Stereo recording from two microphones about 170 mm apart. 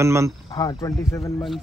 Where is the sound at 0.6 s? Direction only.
20° left (ahead or behind).